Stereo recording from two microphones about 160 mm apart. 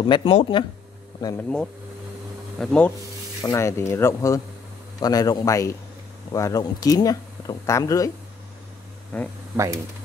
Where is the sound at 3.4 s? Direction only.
20° left (ahead or behind).